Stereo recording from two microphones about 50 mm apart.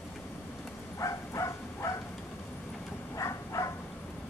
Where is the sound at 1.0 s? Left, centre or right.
Left.